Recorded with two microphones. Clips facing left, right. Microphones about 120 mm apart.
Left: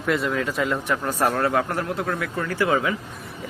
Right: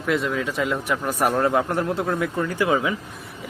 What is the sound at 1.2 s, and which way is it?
A man's voice, 15° right (ahead or behind).